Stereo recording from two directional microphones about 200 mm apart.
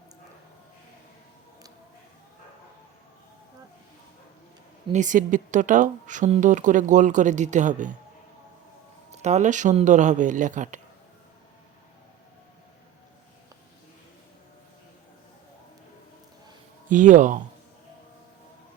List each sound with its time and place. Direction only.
4.9 s speech: 40° right (ahead or behind)
9.2 s speech: 35° right (ahead or behind)
16.9 s speech: 40° right (ahead or behind)